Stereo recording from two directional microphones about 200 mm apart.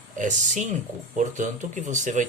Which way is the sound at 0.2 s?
40° right (ahead or behind).